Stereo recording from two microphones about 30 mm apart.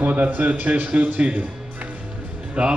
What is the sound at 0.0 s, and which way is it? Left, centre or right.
A man's voice, right.